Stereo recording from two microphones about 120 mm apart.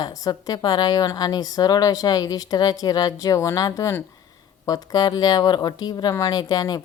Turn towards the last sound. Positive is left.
turn(degrees=35)  # may be behind; listen again after turning